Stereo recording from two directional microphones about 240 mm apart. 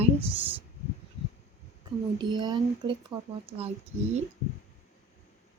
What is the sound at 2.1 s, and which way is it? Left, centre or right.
Speech, centre.